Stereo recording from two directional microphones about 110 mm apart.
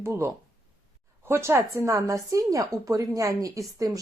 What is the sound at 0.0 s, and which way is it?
Speech, 25° right (ahead or behind).